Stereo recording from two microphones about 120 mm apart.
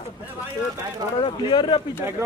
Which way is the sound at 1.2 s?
40° left (ahead or behind).